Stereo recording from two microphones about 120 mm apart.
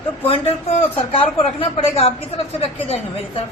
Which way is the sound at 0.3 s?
55° left (ahead or behind).